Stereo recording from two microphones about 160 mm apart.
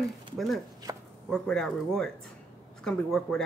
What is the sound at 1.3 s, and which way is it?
Speech, 5° left (ahead or behind).